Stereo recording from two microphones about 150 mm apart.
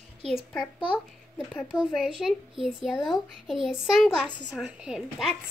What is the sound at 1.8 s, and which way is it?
A child's voice, centre (ahead or behind).